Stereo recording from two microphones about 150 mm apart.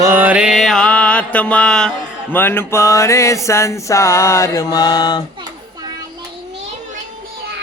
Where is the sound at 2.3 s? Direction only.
15° left (ahead or behind).